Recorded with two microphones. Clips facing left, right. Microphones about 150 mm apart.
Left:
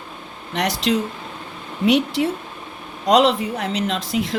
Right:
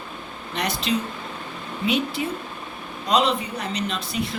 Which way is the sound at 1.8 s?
80° left.